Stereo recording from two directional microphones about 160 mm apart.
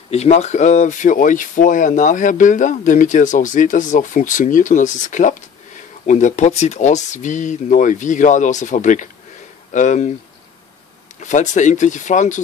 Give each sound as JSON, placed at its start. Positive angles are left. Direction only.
{"t": 0.1, "sound": "speech", "side_deg": 40}
{"t": 11.1, "sound": "speech", "side_deg": 50}